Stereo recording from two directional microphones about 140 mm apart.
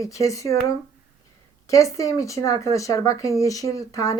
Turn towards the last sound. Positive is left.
turn(degrees=25)  # may be behind; listen again after turning